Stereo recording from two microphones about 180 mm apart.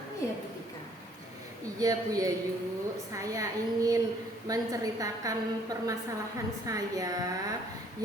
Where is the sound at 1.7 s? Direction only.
20° right (ahead or behind).